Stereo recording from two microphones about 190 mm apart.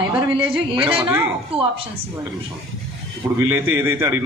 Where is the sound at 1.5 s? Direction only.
30° right (ahead or behind).